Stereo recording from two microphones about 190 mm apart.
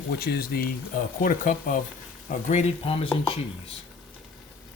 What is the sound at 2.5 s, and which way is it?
Speech, 35° left (ahead or behind).